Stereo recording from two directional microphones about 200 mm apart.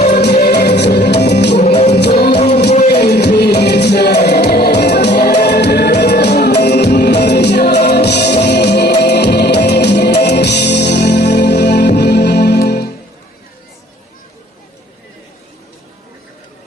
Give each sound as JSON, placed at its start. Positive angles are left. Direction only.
{"t": 0.0, "sound": "music", "side_deg": 55}
{"t": 1.6, "sound": "music", "side_deg": 30}
{"t": 1.9, "sound": "music", "side_deg": 55}